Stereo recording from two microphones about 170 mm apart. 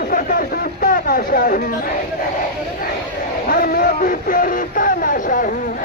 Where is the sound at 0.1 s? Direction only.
55° left (ahead or behind).